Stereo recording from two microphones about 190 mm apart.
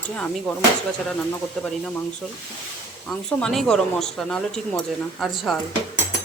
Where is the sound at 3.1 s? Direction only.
Centre (ahead or behind).